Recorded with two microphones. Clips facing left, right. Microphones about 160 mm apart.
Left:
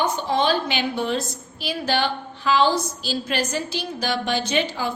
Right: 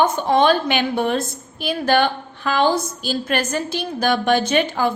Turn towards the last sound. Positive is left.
turn(degrees=-55)  # may be behind; listen again after turning